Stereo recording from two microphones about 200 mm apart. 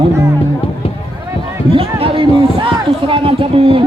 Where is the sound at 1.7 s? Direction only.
25° right (ahead or behind).